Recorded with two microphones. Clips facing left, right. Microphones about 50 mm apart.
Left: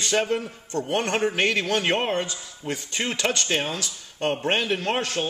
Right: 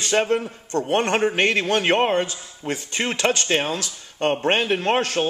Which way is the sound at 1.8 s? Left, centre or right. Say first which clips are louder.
Right 4 dB; right.